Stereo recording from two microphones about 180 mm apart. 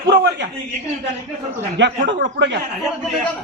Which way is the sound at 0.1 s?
75° right (ahead or behind).